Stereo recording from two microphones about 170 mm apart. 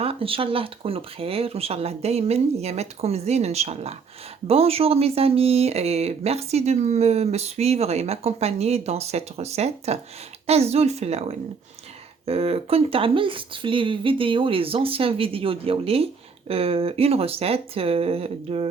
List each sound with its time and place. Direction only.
0.0 s speech: 35° right (ahead or behind)